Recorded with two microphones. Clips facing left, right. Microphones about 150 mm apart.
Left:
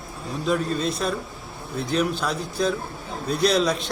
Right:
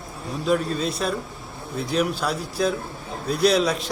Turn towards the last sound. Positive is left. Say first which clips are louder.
# right 1 dB
turn(degrees=-5)  # may be behind; listen again after turning